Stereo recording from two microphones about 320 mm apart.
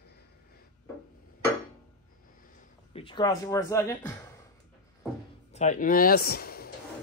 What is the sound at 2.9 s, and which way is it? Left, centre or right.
Speech, centre.